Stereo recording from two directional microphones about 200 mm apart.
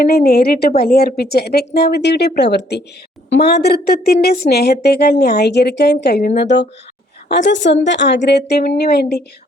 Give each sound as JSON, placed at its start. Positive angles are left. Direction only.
{"t": 0.0, "sound": "a woman's voice", "side_deg": 50}